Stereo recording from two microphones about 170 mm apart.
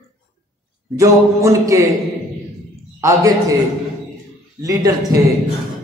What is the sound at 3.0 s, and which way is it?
Speech, 20° right (ahead or behind).